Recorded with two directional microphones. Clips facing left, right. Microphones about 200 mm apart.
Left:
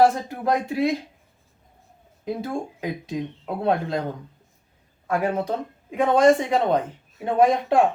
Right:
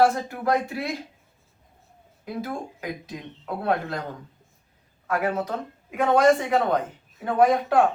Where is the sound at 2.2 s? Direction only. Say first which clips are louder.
Left 3 dB; 25° left (ahead or behind).